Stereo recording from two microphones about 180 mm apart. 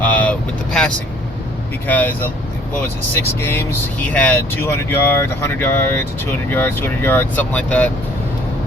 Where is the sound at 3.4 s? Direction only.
15° left (ahead or behind).